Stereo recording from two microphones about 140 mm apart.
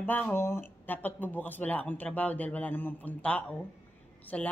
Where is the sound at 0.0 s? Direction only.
10° left (ahead or behind).